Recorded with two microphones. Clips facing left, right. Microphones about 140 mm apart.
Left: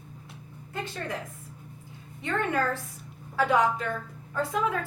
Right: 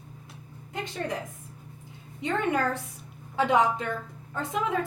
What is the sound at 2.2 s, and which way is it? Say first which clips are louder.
A woman's voice: right 1 dB; 20° right (ahead or behind).